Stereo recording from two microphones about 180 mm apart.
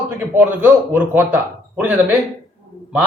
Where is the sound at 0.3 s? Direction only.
10° right (ahead or behind).